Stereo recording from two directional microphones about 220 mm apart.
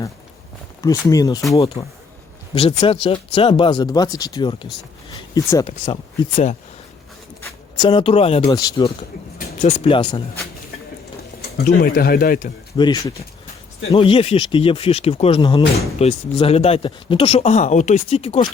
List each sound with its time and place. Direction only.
0.8 s speech: 15° left (ahead or behind)
5.8 s speech: 30° left (ahead or behind)
7.8 s speech: 25° left (ahead or behind)
9.4 s a sound: 35° left (ahead or behind)
9.9 s speech: 20° left (ahead or behind)
11.5 s speech: 45° left (ahead or behind)
12.7 s speech: 20° left (ahead or behind)